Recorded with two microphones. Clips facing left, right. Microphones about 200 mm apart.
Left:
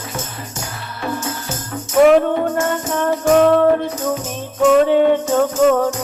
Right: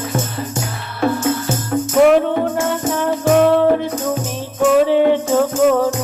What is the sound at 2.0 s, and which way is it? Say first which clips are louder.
Music: left 1 dB; centre (ahead or behind).